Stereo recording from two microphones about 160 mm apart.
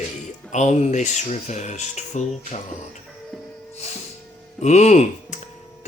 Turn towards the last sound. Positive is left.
turn(degrees=45)  # may be behind; listen again after turning